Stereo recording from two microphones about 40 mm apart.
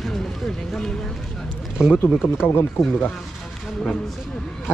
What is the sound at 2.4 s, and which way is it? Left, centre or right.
Speech, left.